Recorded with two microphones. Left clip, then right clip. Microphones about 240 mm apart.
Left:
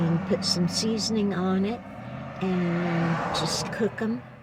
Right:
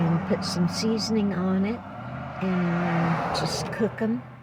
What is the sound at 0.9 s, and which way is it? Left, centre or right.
Speech, centre.